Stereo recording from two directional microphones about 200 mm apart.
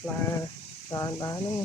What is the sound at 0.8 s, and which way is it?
Speech, 15° left (ahead or behind).